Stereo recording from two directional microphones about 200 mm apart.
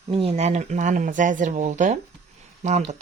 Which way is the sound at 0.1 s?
30° right (ahead or behind).